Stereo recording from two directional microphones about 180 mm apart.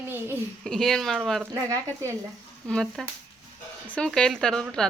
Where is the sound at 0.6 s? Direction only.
Centre (ahead or behind).